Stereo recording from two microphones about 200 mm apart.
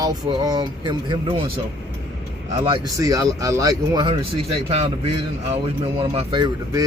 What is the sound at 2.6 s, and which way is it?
Speech, 20° right (ahead or behind).